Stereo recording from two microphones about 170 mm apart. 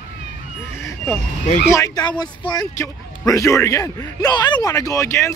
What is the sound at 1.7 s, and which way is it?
Speech, 20° left (ahead or behind).